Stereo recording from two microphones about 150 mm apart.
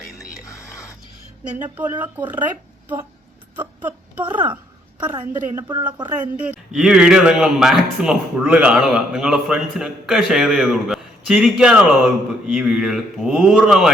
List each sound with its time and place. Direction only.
0.4 s music: 20° left (ahead or behind)
1.8 s speech: 10° right (ahead or behind)
4.2 s a woman's voice: 30° right (ahead or behind)
6.4 s a man's voice: 5° right (ahead or behind)